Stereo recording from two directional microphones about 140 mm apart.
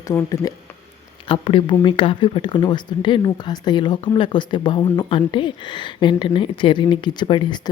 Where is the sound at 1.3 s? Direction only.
35° left (ahead or behind).